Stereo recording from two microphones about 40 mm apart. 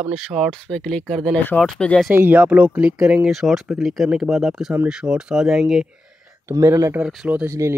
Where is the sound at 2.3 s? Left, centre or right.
Right.